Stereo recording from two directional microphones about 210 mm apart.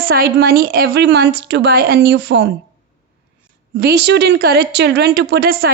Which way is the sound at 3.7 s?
50° right (ahead or behind).